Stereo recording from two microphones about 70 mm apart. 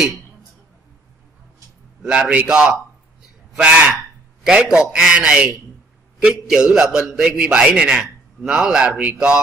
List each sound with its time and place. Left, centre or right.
2.0 s a man's voice: centre
3.9 s fowl: centre
4.6 s a man's voice: centre